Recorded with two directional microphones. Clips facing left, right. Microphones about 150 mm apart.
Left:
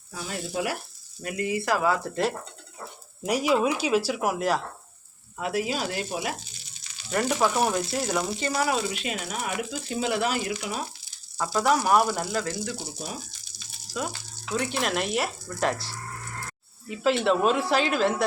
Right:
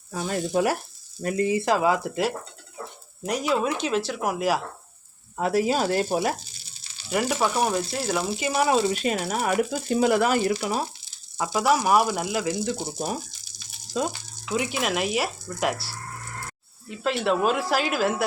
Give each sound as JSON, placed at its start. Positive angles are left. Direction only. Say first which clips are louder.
{"t": 0.1, "sound": "speech", "louder": "right 7 dB", "side_deg": -50}
{"t": 1.2, "sound": "speech", "louder": "right 5 dB", "side_deg": -30}
{"t": 3.2, "sound": "speech", "louder": "left 1 dB", "side_deg": 5}
{"t": 5.4, "sound": "speech", "louder": "right 5 dB", "side_deg": -40}
{"t": 7.1, "sound": "speech", "louder": "even", "side_deg": -5}
{"t": 8.5, "sound": "speech", "louder": "right 6 dB", "side_deg": -25}
{"t": 8.9, "sound": "speech", "louder": "right 7 dB", "side_deg": -40}
{"t": 10.5, "sound": "speech", "louder": "right 6 dB", "side_deg": -35}
{"t": 11.3, "sound": "speech", "louder": "right 1 dB", "side_deg": -15}
{"t": 11.6, "sound": "speech", "louder": "right 1 dB", "side_deg": -5}
{"t": 12.6, "sound": "speech", "louder": "right 6 dB", "side_deg": -25}
{"t": 13.9, "sound": "frying", "louder": "right 5 dB", "side_deg": -25}
{"t": 14.5, "sound": "speech", "louder": "right 1 dB", "side_deg": -5}
{"t": 17.0, "sound": "speech", "louder": "left 1 dB", "side_deg": 0}